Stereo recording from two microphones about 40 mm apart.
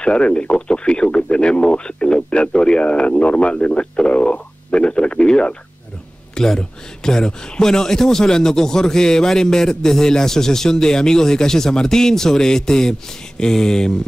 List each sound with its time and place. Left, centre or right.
0.0 s speech: left
6.3 s speech: centre